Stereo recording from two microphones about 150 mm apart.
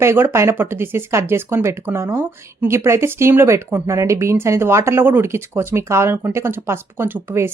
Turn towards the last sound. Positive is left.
turn(degrees=-15)  # may be behind; listen again after turning